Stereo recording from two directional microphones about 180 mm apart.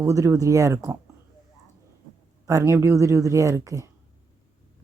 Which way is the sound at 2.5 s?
15° right (ahead or behind).